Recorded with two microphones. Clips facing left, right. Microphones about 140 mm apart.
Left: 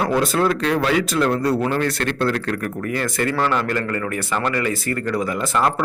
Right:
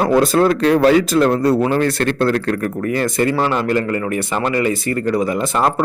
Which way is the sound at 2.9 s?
25° right (ahead or behind).